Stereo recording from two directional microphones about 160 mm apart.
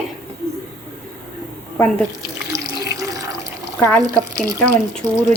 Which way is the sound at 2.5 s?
20° right (ahead or behind).